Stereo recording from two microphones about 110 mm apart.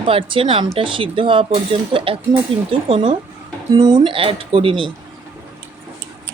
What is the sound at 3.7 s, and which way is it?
Speech, 35° right (ahead or behind).